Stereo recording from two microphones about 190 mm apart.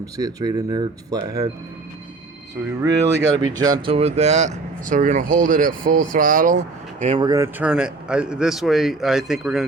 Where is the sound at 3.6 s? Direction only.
20° right (ahead or behind).